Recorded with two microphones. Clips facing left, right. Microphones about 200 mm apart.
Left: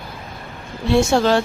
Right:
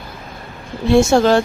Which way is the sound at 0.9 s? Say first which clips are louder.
Right 4 dB; 45° right (ahead or behind).